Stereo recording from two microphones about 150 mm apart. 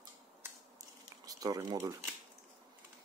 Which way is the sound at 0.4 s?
25° right (ahead or behind).